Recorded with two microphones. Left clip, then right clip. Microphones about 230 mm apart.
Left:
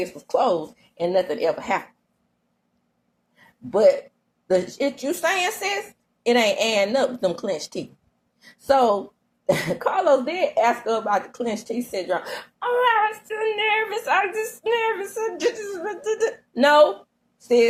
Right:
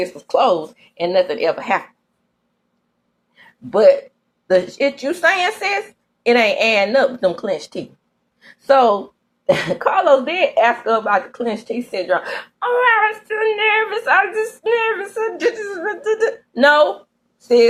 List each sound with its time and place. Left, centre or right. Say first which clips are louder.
0.0 s a woman's voice: right 6 dB; centre
4.4 s a woman's voice: right 6 dB; centre